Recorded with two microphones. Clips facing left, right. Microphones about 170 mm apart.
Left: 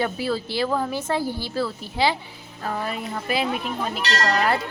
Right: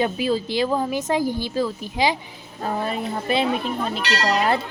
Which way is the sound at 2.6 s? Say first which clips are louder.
Right 3 dB; 25° right (ahead or behind).